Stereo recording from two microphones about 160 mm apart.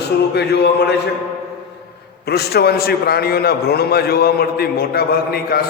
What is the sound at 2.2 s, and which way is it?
A man's voice, 80° left.